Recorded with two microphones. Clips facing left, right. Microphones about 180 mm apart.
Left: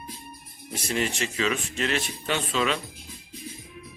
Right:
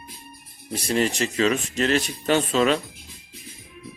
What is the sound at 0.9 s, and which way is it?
Speech, 35° right (ahead or behind).